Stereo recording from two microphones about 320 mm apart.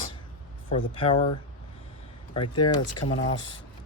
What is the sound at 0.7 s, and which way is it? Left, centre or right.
Speech, centre.